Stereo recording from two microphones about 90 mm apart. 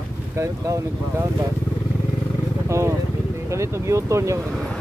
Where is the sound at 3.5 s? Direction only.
35° right (ahead or behind).